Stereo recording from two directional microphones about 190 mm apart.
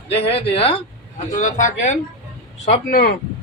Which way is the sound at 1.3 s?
40° left (ahead or behind).